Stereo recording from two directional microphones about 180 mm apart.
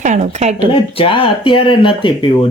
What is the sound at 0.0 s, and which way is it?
Speech, 40° right (ahead or behind).